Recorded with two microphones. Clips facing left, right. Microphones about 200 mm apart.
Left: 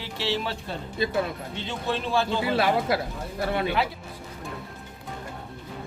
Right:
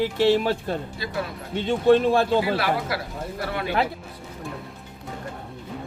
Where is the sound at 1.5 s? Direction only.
50° right (ahead or behind).